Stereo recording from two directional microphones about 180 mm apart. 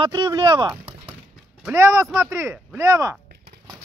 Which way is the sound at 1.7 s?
15° right (ahead or behind).